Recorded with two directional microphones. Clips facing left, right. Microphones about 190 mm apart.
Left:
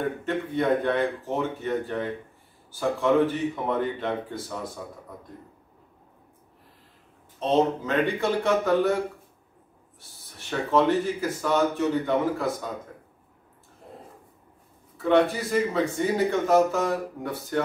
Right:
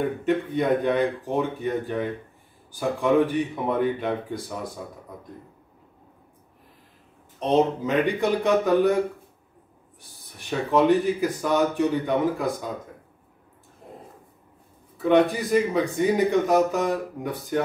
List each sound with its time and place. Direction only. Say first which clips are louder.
0.2 s speech: right 3 dB; 15° right (ahead or behind)
7.3 s speech: right 1 dB; 15° right (ahead or behind)
10.4 s speech: right 2 dB; 15° right (ahead or behind)
15.0 s speech: right 2 dB; 15° right (ahead or behind)